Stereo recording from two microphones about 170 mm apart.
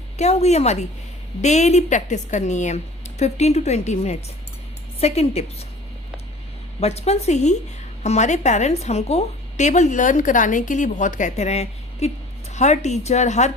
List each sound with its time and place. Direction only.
0.2 s speech: 40° left (ahead or behind)
6.7 s a woman's voice: 40° left (ahead or behind)